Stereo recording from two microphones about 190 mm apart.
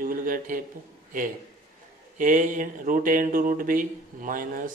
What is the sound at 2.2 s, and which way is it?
Speech, 45° right (ahead or behind).